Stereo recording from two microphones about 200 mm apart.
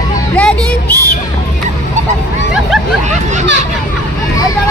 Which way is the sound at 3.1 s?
35° right (ahead or behind).